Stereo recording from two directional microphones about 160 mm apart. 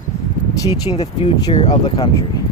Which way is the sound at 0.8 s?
35° left (ahead or behind).